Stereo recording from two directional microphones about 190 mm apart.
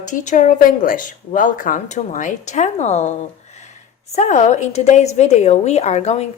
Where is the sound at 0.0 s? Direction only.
40° left (ahead or behind).